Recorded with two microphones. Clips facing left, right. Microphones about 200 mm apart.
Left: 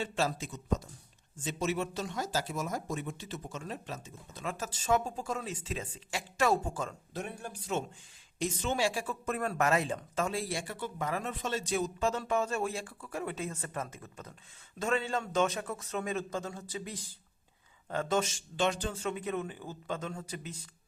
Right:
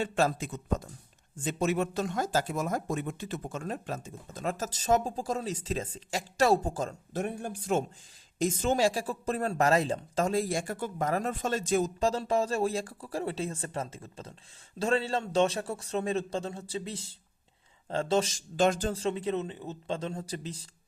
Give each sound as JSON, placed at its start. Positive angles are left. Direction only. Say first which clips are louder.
{"t": 0.0, "sound": "speech", "louder": "right 5 dB", "side_deg": -50}